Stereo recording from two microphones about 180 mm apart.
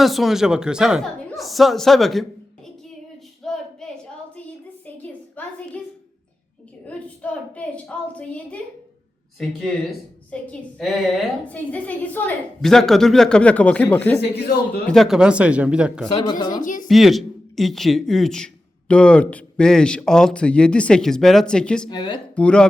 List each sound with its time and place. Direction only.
0.0 s a man's voice: centre (ahead or behind)
3.4 s a sound: centre (ahead or behind)
5.4 s a woman's voice: 10° left (ahead or behind)
14.2 s speech: 65° left (ahead or behind)
14.8 s a man's voice: centre (ahead or behind)
16.4 s speech: 25° left (ahead or behind)
16.6 s speech: 45° left (ahead or behind)
16.9 s a man's voice: centre (ahead or behind)
21.8 s speech: 25° left (ahead or behind)
22.4 s a man's voice: 5° left (ahead or behind)